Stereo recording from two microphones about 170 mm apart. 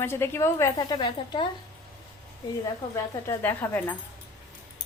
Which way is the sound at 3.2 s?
10° left (ahead or behind).